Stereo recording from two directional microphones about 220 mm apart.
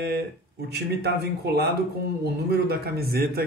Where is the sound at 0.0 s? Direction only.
50° right (ahead or behind).